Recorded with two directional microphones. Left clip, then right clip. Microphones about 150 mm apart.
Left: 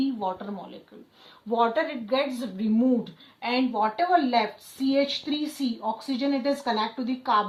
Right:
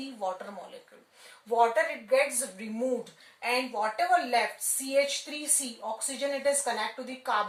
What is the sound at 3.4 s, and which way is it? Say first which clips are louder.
Speech: left 4 dB; 50° right (ahead or behind).